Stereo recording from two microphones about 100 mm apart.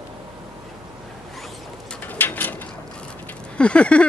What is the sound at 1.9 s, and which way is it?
Bird, 15° left (ahead or behind).